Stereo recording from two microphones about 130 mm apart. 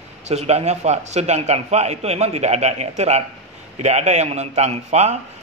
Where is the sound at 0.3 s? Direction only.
55° right (ahead or behind).